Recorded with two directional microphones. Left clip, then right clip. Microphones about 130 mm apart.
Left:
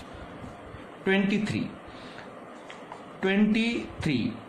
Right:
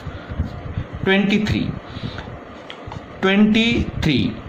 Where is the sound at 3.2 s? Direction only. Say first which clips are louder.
Right 9 dB; 30° right (ahead or behind).